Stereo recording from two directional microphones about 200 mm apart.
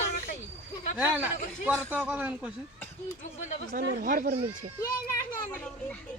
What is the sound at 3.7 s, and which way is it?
Speech, 45° right (ahead or behind).